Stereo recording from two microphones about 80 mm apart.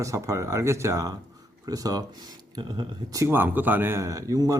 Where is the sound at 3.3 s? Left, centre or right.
Right.